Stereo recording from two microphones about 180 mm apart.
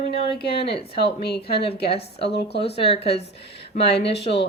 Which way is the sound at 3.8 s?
70° left (ahead or behind).